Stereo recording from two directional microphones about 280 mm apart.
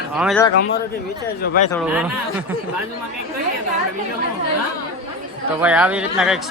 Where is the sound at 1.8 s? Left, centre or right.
Centre.